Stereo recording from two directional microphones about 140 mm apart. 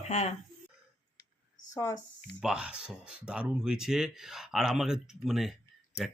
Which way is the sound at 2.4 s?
5° right (ahead or behind).